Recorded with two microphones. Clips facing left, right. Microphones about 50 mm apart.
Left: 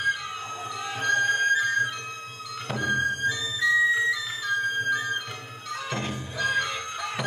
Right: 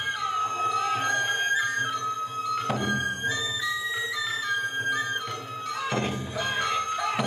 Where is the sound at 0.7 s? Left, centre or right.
Right.